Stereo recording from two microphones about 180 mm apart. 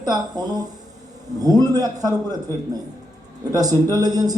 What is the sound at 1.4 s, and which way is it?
Speech, 20° right (ahead or behind).